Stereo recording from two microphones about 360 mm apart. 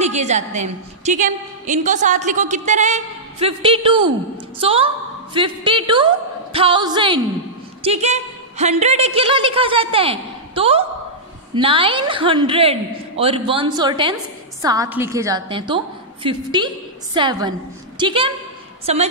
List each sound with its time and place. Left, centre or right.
0.0 s a woman's voice: centre